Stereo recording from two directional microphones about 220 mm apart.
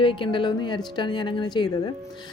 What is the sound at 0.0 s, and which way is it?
A woman's voice, 20° left (ahead or behind).